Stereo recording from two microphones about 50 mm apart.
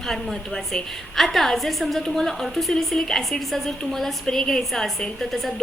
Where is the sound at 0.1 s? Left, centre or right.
Centre.